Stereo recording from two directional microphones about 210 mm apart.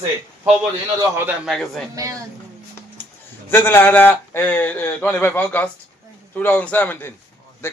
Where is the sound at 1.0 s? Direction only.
10° right (ahead or behind).